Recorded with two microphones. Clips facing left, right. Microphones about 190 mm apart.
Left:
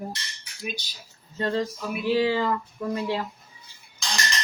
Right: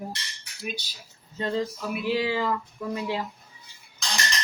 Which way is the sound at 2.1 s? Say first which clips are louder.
Left 4 dB; 40° left (ahead or behind).